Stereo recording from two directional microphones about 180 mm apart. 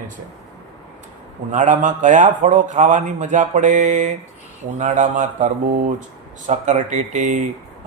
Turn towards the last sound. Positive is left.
turn(degrees=-40)  # may be behind; listen again after turning